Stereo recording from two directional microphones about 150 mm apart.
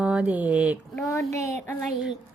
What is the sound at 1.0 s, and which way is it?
Speech, 20° left (ahead or behind).